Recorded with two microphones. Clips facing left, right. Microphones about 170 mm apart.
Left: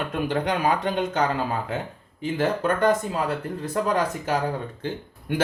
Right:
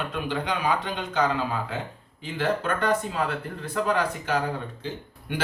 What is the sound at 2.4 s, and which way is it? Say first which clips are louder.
Speech: left 3 dB; 45° left (ahead or behind).